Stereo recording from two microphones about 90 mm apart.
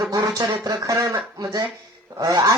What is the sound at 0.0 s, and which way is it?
Speech, 50° right (ahead or behind).